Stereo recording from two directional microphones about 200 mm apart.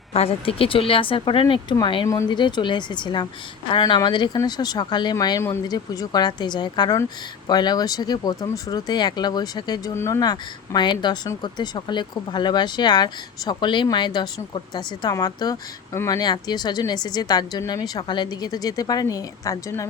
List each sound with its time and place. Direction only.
0.1 s speech: 30° left (ahead or behind)